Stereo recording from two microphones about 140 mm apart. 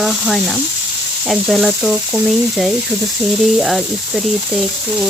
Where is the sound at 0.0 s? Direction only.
Centre (ahead or behind).